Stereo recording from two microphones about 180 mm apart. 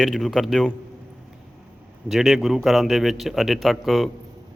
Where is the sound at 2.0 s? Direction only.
5° right (ahead or behind).